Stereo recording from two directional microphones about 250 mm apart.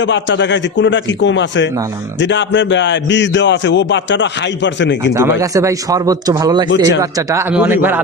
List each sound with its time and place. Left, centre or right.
0.0 s speech: left
5.4 s speech: centre